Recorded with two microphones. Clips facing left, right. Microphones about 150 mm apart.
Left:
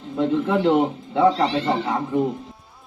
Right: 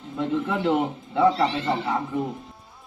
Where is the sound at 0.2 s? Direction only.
35° left (ahead or behind).